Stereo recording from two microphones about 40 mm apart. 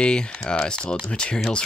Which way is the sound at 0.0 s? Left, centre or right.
Left.